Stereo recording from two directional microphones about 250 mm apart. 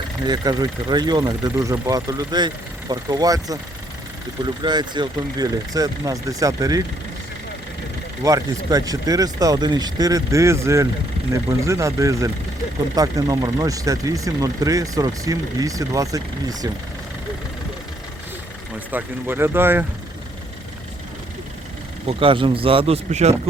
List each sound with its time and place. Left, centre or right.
0.3 s speech: centre
8.2 s speech: centre
18.9 s speech: centre
22.0 s speech: right